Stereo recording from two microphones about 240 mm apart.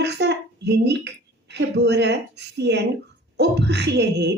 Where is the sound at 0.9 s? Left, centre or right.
Right.